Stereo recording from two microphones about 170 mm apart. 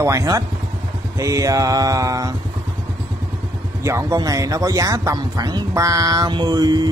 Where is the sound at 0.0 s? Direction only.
20° right (ahead or behind).